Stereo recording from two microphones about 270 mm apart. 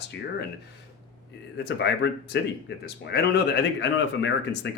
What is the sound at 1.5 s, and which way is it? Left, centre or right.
Speech, left.